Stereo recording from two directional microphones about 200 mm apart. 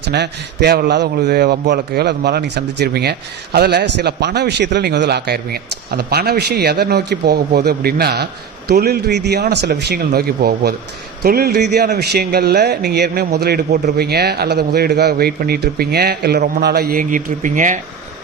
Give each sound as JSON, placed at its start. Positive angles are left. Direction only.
{"t": 0.1, "sound": "a man's voice", "side_deg": -55}